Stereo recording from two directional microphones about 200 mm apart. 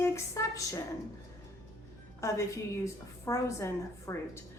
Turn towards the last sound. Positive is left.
turn(degrees=15)  # may be behind; listen again after turning